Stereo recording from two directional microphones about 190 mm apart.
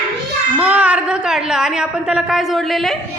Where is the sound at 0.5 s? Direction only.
5° right (ahead or behind).